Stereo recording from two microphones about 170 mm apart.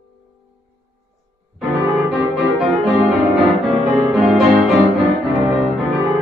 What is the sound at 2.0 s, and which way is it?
Music, centre (ahead or behind).